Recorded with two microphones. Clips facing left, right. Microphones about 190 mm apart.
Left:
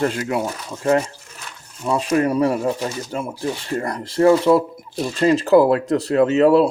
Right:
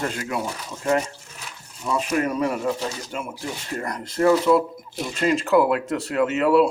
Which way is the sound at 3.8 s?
30° left (ahead or behind).